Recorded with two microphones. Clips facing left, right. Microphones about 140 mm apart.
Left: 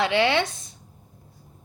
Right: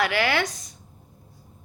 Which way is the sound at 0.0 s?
25° left (ahead or behind).